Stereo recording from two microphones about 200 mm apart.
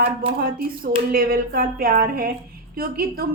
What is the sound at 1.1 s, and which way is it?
A woman's voice, 45° right (ahead or behind).